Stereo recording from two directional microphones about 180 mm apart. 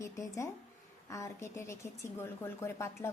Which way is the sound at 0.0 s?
15° left (ahead or behind).